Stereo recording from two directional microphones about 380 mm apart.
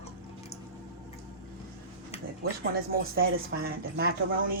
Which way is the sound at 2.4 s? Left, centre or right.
Right.